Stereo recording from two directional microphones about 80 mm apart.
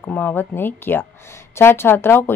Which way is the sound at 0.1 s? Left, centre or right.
Centre.